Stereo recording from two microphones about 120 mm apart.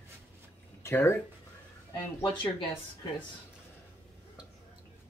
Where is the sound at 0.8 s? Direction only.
20° left (ahead or behind).